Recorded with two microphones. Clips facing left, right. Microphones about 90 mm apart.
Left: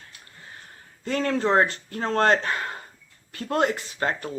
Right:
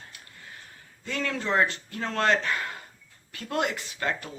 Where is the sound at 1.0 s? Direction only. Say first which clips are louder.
Left 7 dB; 40° left (ahead or behind).